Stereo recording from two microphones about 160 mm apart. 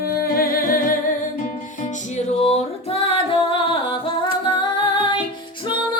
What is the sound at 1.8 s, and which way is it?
Music, 45° left (ahead or behind).